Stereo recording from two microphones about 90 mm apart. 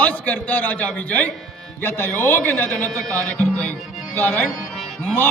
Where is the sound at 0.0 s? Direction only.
20° left (ahead or behind).